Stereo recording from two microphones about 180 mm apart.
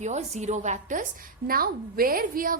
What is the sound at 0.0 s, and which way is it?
A woman's voice, 40° right (ahead or behind).